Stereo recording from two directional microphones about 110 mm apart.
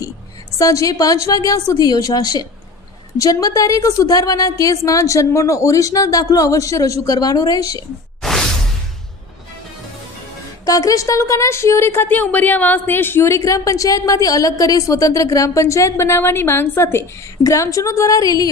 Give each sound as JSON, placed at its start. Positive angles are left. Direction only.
{"t": 0.6, "sound": "a woman's voice", "side_deg": 30}
{"t": 8.2, "sound": "whoosh", "side_deg": 5}
{"t": 10.7, "sound": "a woman's voice", "side_deg": 30}